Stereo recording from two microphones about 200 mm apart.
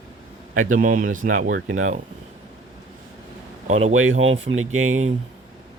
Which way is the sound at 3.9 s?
85° right.